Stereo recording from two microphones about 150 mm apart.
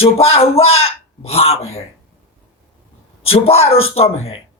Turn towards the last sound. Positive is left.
turn(degrees=40)  # may be behind; listen again after turning